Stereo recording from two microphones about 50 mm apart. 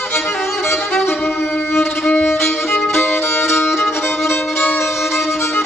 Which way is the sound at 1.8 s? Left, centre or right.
Centre.